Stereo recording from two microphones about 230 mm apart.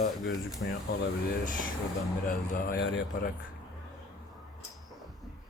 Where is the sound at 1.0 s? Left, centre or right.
Left.